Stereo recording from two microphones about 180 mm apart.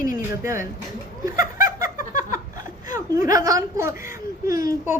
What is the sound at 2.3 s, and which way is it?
Chuckle, 20° right (ahead or behind).